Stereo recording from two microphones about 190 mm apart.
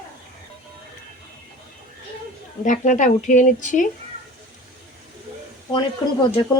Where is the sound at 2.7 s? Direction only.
40° left (ahead or behind).